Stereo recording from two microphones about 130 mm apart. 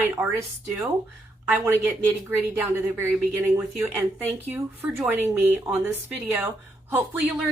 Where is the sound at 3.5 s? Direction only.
10° right (ahead or behind).